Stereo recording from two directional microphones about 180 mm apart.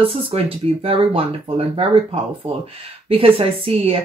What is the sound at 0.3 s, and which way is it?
Speech, 35° right (ahead or behind).